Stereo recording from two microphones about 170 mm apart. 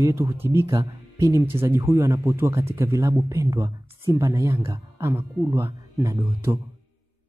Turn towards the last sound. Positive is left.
turn(degrees=-15)  # may be behind; listen again after turning